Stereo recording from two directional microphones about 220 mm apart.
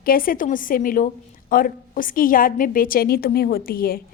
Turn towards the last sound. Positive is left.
turn(degrees=45)  # may be behind; listen again after turning